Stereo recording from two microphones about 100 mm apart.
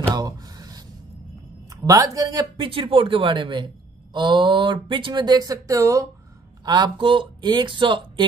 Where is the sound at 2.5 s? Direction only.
55° right (ahead or behind); by 6.0 s 35° right (ahead or behind).